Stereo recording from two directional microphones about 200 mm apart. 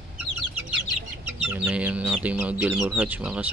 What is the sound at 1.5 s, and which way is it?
Speech, 5° right (ahead or behind).